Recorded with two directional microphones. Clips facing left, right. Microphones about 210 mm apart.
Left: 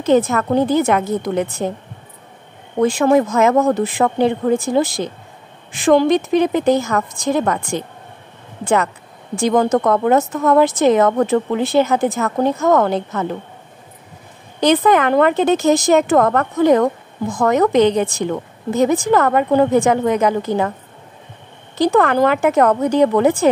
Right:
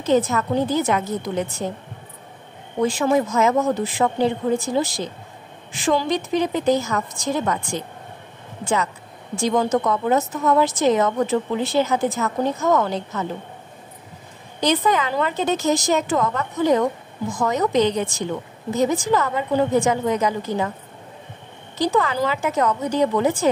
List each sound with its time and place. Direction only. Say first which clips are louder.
0.0 s a woman's voice: left 4 dB; 60° left (ahead or behind)
2.8 s a woman's voice: left 5 dB; 60° left (ahead or behind)
14.6 s a woman's voice: left 6 dB; 60° left (ahead or behind)
21.7 s a woman's voice: left 6 dB; 55° left (ahead or behind)